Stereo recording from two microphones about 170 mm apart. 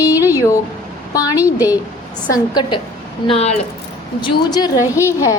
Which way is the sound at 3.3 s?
40° left (ahead or behind).